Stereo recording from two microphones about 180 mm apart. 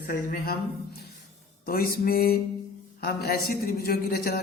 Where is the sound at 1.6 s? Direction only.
55° left (ahead or behind).